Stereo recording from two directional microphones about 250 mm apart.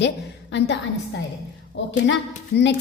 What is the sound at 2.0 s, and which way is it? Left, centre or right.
Speech, left.